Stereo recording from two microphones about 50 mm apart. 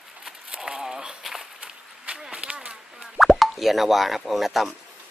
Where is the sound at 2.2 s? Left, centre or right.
Right.